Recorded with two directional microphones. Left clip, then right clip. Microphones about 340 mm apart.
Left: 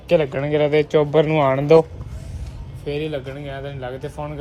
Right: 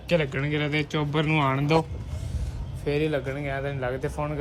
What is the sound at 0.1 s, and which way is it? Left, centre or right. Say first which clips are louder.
Speech: left 7 dB; centre.